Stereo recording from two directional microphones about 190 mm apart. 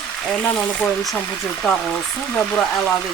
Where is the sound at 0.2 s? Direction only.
5° left (ahead or behind).